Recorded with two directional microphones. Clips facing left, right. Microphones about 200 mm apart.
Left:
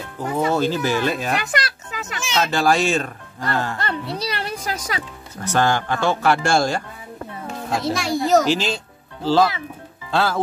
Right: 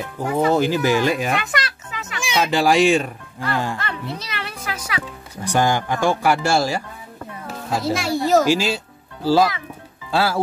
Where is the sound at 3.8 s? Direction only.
35° left (ahead or behind).